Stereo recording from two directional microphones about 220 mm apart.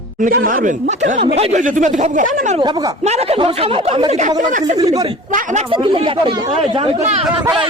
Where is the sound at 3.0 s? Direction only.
30° right (ahead or behind).